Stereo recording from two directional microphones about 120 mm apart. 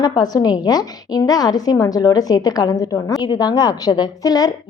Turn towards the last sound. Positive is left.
turn(degrees=35)  # may be behind; listen again after turning